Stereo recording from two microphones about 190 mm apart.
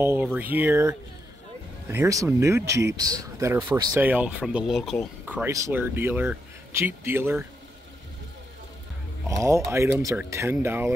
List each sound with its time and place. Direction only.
0.0 s speech: 10° right (ahead or behind)
9.7 s speech: 15° right (ahead or behind)